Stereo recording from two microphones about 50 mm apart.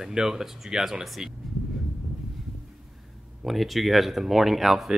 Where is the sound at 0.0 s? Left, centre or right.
Centre.